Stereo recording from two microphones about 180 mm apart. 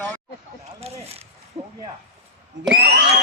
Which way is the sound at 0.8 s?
35° right (ahead or behind).